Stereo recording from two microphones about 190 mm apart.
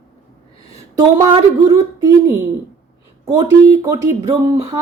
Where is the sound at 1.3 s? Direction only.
20° right (ahead or behind).